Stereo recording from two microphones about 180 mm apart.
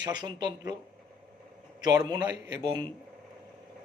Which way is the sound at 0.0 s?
25° right (ahead or behind).